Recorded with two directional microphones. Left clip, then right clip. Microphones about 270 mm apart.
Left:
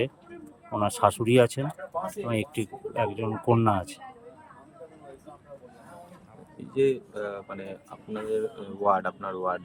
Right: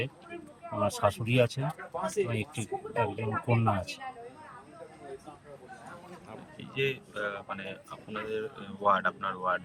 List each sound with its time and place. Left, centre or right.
0.9 s speech: centre
6.7 s speech: left